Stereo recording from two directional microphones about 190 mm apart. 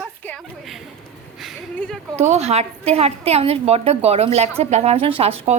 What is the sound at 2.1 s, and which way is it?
A woman's voice, 35° right (ahead or behind).